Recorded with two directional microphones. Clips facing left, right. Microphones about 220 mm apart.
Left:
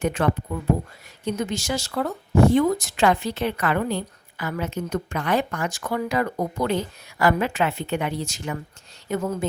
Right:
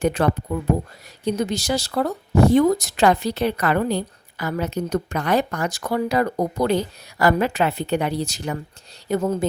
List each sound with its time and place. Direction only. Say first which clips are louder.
0.0 s speech: right 3 dB; 35° right (ahead or behind)